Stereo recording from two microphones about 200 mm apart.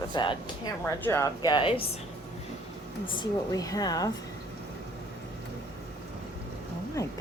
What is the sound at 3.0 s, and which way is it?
A woman's voice, 20° left (ahead or behind).